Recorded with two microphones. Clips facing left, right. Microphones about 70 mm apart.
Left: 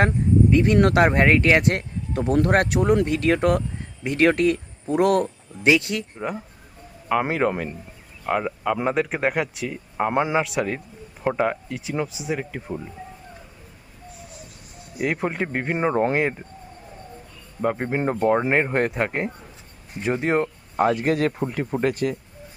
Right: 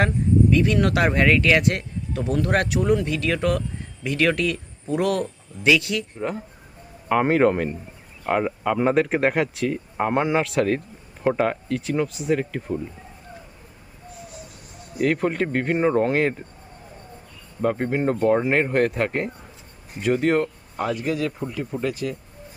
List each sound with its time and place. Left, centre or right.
0.5 s speech: left
6.1 s speech: centre
7.1 s speech: centre
14.9 s speech: centre
17.6 s speech: centre
20.7 s speech: left